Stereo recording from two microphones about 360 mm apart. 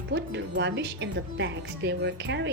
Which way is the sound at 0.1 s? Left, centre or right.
Right.